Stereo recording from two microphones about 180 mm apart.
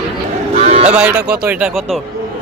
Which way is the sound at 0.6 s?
35° right (ahead or behind).